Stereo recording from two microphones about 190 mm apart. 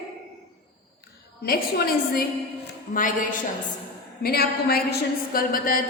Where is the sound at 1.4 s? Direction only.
50° left (ahead or behind).